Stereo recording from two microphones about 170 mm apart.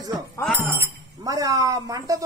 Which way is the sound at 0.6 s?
15° right (ahead or behind).